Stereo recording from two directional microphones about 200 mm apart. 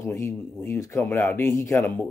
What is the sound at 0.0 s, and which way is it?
Speech, 10° left (ahead or behind).